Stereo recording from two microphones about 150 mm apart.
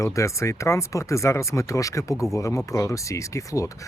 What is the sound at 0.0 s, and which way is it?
Speech, 20° left (ahead or behind).